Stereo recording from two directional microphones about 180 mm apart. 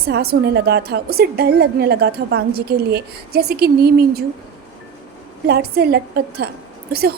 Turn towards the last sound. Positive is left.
turn(degrees=-60)  # may be behind; listen again after turning